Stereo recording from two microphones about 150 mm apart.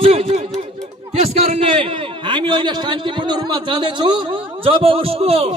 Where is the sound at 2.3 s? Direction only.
35° right (ahead or behind).